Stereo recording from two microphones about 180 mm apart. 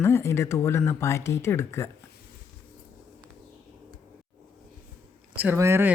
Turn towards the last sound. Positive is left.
turn(degrees=-15)  # may be behind; listen again after turning